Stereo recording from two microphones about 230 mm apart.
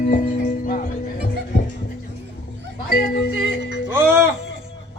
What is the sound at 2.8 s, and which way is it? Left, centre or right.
Music, left.